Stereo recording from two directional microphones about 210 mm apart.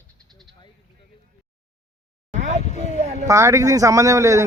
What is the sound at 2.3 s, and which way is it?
Vehicle, 35° right (ahead or behind).